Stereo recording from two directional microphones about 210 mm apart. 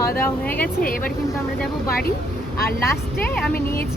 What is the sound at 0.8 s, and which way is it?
Speech, 45° left (ahead or behind).